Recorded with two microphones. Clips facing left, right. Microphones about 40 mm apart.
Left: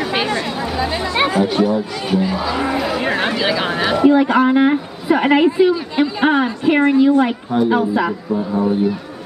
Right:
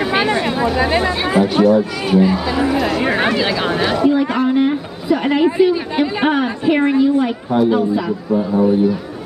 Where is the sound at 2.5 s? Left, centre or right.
Centre.